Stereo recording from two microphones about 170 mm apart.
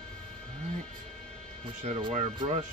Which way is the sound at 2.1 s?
40° right (ahead or behind).